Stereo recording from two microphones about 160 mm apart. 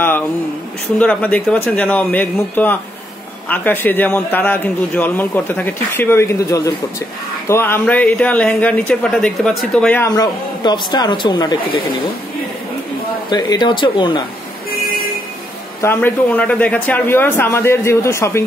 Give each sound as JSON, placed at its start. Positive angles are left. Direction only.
{"t": 0.9, "sound": "speech", "side_deg": 10}
{"t": 13.3, "sound": "speech", "side_deg": 25}
{"t": 15.8, "sound": "speech", "side_deg": 15}